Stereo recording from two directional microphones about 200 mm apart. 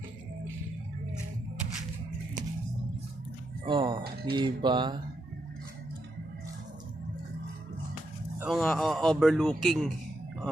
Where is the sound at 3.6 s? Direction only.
25° right (ahead or behind).